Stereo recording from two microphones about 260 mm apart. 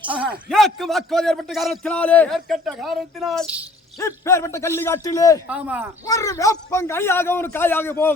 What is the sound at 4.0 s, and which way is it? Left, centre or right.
A man's voice, centre.